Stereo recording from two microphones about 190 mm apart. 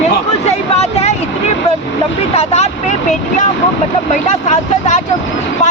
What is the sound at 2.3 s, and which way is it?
Speech, 35° left (ahead or behind).